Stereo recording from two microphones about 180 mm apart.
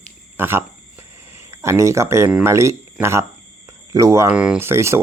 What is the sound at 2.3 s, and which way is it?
Speech, 15° right (ahead or behind).